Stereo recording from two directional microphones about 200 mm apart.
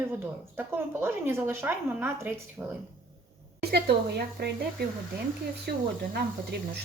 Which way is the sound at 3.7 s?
55° right (ahead or behind).